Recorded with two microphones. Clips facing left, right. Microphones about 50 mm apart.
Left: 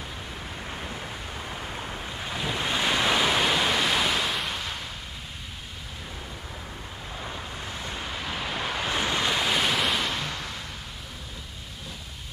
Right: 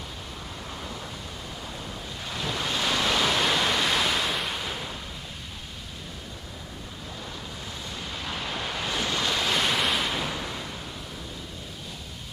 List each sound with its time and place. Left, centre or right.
0.4 s waves: left; by 4.9 s centre
7.2 s waves: left
8.1 s waves: centre